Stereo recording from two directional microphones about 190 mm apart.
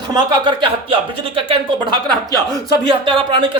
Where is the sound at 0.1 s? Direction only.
25° right (ahead or behind).